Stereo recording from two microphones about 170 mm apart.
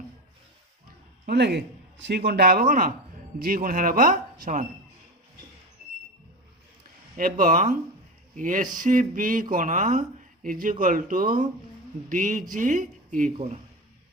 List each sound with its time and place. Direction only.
1.3 s a man's voice: 85° right; by 4.6 s 50° right (ahead or behind)
7.2 s speech: 55° right (ahead or behind)
13.3 s speech: 40° right (ahead or behind)